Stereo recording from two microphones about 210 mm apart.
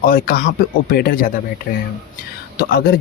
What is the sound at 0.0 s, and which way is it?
Speech, 45° left (ahead or behind).